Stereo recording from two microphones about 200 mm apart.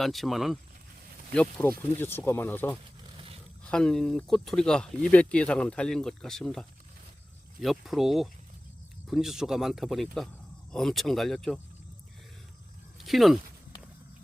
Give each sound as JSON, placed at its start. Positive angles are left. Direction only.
{"t": 0.0, "sound": "speech", "side_deg": 0}
{"t": 3.2, "sound": "a sound", "side_deg": -30}
{"t": 3.6, "sound": "speech", "side_deg": 5}
{"t": 13.0, "sound": "speech", "side_deg": 0}